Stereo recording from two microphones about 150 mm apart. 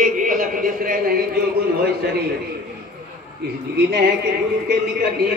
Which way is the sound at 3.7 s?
90° right.